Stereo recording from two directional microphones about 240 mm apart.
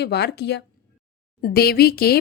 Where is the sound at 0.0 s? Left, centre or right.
Left.